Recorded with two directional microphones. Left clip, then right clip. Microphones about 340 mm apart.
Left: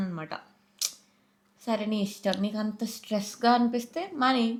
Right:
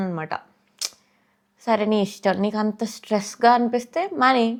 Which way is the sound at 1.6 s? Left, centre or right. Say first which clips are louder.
Right 10 dB; right.